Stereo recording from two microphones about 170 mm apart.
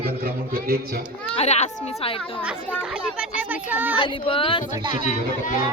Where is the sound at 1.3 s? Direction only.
40° left (ahead or behind).